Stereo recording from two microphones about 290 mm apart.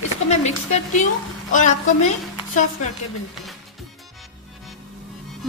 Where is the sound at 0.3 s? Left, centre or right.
Left.